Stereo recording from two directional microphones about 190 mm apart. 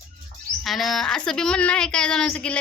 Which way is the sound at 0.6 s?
Centre (ahead or behind).